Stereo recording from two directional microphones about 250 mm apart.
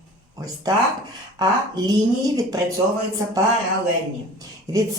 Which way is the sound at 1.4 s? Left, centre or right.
Centre.